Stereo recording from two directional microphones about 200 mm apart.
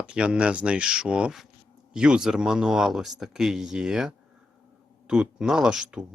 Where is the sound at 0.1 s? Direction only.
5° right (ahead or behind).